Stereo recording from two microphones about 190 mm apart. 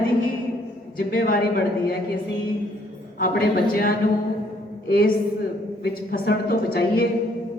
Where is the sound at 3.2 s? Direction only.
50° left (ahead or behind).